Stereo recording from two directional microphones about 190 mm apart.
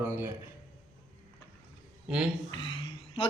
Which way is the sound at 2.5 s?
25° left (ahead or behind).